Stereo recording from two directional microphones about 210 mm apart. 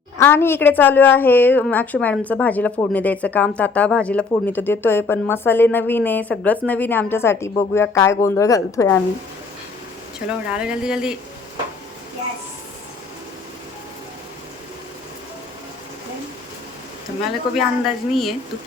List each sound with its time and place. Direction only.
0.2 s a woman's voice: 10° left (ahead or behind)
10.5 s a woman's voice: 5° right (ahead or behind)
17.5 s a woman's voice: centre (ahead or behind)